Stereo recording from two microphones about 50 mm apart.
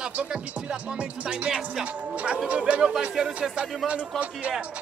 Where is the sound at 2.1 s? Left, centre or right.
Right.